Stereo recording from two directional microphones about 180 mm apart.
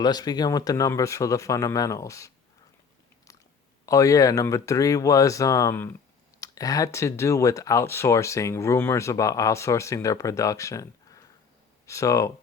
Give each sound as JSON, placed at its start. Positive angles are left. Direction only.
{"t": 0.0, "sound": "speech", "side_deg": 20}
{"t": 3.8, "sound": "speech", "side_deg": 20}